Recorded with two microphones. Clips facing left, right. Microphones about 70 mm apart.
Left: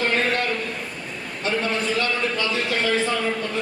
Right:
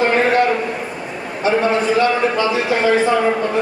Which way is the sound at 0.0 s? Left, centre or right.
Right.